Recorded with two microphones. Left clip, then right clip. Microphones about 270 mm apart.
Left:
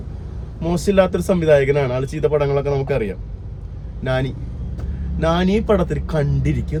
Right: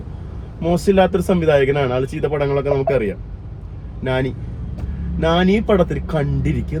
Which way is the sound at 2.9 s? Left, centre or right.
Left.